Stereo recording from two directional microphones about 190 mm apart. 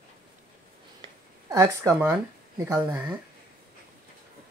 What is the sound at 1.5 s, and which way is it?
Speech, 15° right (ahead or behind).